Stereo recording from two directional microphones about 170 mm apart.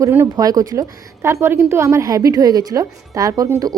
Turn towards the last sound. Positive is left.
turn(degrees=-20)  # may be behind; listen again after turning